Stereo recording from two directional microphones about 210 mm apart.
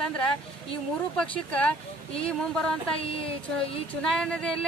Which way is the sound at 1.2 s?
5° left (ahead or behind).